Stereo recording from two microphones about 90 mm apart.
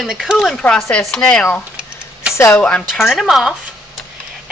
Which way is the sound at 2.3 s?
30° left (ahead or behind).